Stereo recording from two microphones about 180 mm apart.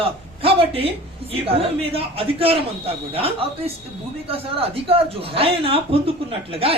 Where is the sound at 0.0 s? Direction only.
30° right (ahead or behind).